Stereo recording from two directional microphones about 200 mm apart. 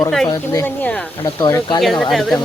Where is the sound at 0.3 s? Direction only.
10° left (ahead or behind).